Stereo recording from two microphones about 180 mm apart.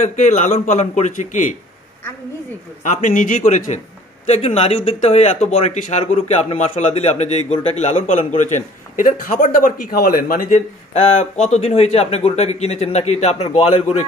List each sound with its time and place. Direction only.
0.0 s a man's voice: 40° left (ahead or behind)
2.8 s a man's voice: 40° left (ahead or behind)
10.9 s speech: 35° left (ahead or behind)